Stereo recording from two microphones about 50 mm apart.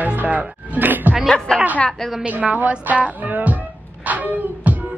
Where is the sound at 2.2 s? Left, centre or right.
Right.